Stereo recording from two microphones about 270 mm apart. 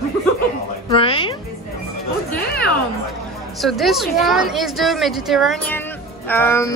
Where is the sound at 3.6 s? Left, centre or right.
Centre.